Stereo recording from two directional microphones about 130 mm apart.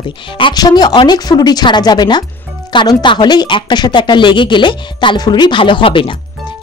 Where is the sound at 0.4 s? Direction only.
35° left (ahead or behind).